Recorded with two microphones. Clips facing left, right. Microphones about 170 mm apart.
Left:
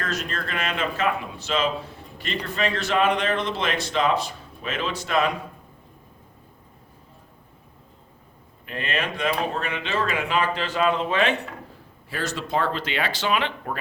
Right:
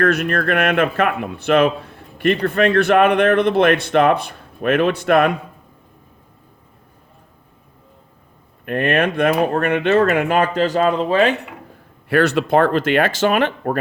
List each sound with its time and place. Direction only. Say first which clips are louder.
0.0 s speech: right 12 dB; 60° right (ahead or behind)
8.6 s speech: right 11 dB; 55° right (ahead or behind); by 11.3 s 40° right (ahead or behind)
12.0 s speech: right 14 dB; 65° right (ahead or behind); by 13.7 s 50° right (ahead or behind)